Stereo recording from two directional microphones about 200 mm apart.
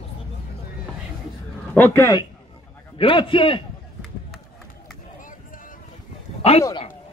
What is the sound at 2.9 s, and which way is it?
Speech, 25° left (ahead or behind).